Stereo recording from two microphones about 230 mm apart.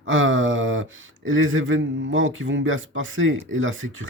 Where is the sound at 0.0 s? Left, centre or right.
Right.